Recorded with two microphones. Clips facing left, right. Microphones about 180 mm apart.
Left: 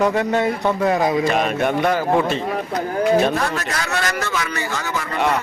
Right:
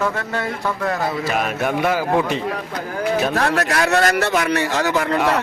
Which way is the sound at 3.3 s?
70° right (ahead or behind).